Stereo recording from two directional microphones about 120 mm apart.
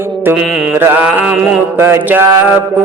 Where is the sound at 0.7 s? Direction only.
20° right (ahead or behind).